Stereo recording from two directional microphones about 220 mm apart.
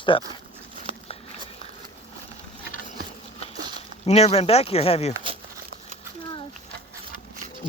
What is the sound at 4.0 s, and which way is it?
Speech, 30° left (ahead or behind).